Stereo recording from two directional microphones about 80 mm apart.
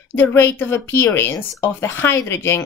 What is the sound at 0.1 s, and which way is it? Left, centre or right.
Speech, left.